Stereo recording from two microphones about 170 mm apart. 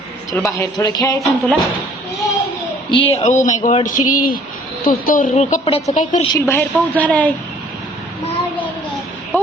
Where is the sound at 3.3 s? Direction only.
45° left (ahead or behind).